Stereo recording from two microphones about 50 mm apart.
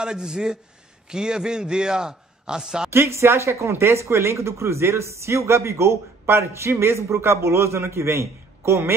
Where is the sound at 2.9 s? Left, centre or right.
Right.